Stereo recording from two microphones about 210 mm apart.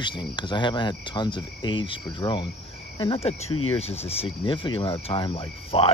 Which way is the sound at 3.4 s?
85° left.